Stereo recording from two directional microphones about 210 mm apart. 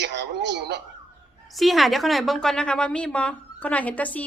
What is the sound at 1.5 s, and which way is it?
A woman's voice, centre (ahead or behind).